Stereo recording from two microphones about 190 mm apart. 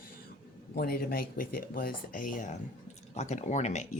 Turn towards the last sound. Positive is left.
turn(degrees=35)  # may be behind; listen again after turning